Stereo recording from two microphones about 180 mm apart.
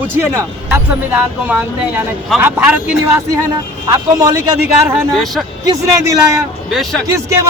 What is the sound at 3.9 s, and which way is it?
A man's voice, 20° right (ahead or behind).